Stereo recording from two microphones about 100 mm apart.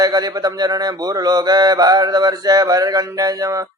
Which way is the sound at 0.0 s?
40° right (ahead or behind).